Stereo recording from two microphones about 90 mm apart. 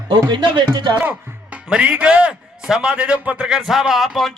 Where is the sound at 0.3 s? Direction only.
60° right (ahead or behind).